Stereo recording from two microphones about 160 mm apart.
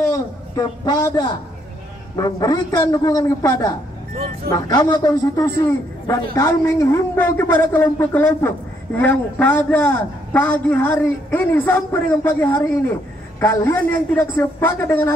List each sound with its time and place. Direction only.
0.0 s a man's voice: 20° left (ahead or behind)